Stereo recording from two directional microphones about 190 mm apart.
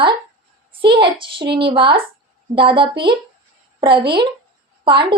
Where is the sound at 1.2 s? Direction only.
25° right (ahead or behind).